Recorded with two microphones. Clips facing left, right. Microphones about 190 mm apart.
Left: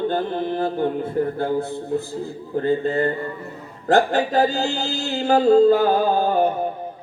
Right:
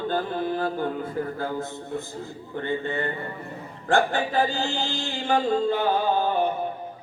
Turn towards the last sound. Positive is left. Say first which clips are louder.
# left 4 dB
turn(degrees=45)  # may be behind; listen again after turning